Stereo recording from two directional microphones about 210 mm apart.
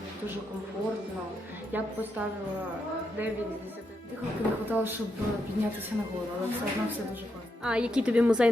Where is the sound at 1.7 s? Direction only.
10° right (ahead or behind).